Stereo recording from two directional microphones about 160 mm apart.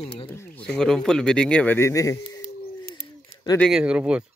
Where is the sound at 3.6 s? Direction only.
5° right (ahead or behind).